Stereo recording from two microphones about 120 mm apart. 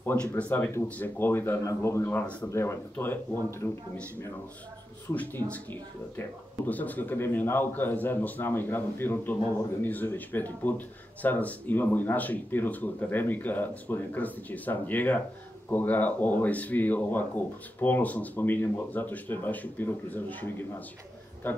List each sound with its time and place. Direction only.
0.0 s a man's voice: 15° left (ahead or behind)
5.0 s speech: 15° left (ahead or behind)